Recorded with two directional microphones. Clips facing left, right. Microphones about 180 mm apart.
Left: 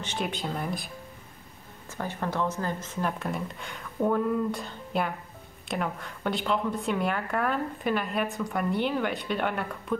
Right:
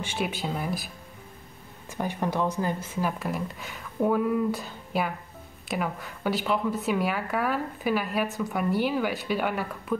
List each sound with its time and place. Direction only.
0.0 s speech: 5° right (ahead or behind)
1.9 s speech: 15° right (ahead or behind)